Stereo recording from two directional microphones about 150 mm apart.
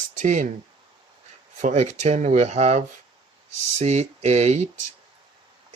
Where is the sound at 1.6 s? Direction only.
55° right (ahead or behind).